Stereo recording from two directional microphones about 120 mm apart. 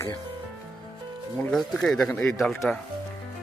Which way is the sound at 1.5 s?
5° left (ahead or behind).